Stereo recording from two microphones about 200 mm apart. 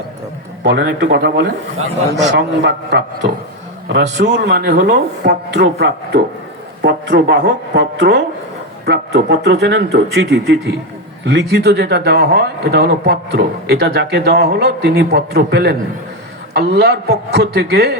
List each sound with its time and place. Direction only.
0.6 s speech: 60° right (ahead or behind)
2.6 s speech: 60° right (ahead or behind)